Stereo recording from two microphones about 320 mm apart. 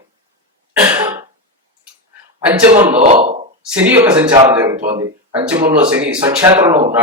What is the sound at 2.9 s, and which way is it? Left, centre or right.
Speech, centre.